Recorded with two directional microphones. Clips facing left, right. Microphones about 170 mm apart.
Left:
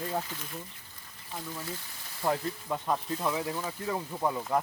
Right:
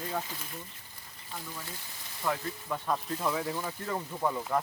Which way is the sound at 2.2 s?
35° left (ahead or behind).